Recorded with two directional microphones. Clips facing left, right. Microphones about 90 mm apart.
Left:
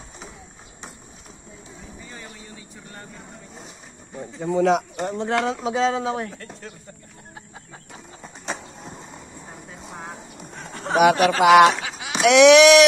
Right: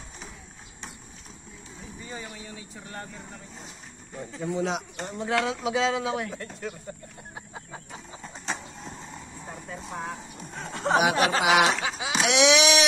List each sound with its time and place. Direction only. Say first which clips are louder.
4.5 s speech: left 10 dB; 60° left (ahead or behind)
5.1 s speech: left 3 dB; 35° left (ahead or behind)
7.3 s chicken: right 2 dB; 20° right (ahead or behind)
11.0 s speech: left 8 dB; 60° left (ahead or behind)